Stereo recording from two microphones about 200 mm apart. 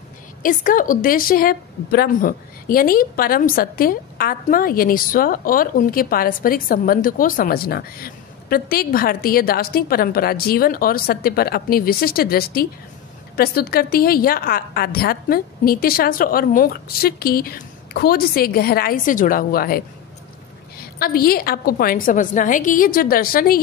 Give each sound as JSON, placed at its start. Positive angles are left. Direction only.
{"t": 0.4, "sound": "a woman's voice", "side_deg": 45}
{"t": 20.8, "sound": "a woman's voice", "side_deg": 50}